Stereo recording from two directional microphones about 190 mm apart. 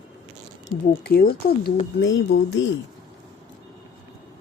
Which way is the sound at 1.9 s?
85° left.